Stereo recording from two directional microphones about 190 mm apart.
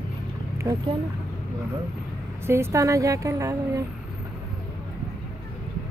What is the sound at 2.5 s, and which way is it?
A woman's voice, 15° right (ahead or behind).